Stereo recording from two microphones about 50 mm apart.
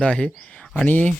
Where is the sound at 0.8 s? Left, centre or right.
Left.